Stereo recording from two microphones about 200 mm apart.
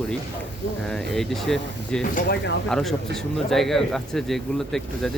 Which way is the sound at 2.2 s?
55° left (ahead or behind).